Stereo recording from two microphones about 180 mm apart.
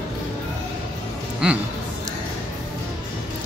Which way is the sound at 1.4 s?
5° right (ahead or behind).